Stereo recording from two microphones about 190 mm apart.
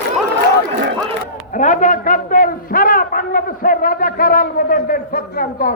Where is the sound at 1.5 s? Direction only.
40° left (ahead or behind).